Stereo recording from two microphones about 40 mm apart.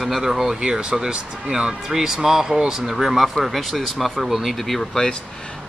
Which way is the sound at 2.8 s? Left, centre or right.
Centre.